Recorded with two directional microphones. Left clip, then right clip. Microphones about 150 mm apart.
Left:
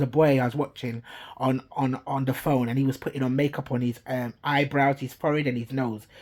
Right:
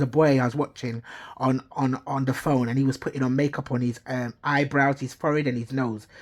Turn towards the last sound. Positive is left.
turn(degrees=-30)  # may be behind; listen again after turning